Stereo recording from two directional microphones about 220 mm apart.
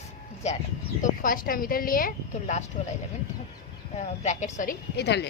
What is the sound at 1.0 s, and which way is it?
Speech, 40° left (ahead or behind).